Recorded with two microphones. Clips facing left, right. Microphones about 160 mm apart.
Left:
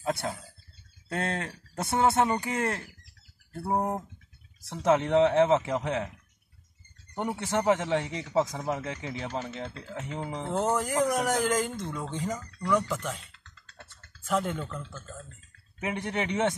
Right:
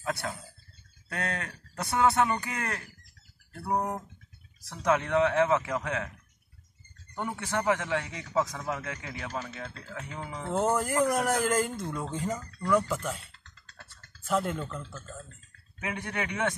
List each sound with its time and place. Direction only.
0.0 s a sound: 25° left (ahead or behind)
1.0 s speech: 25° left (ahead or behind)
7.2 s speech: 20° left (ahead or behind)
10.5 s speech: centre (ahead or behind)
14.2 s speech: centre (ahead or behind)
15.8 s speech: 20° left (ahead or behind)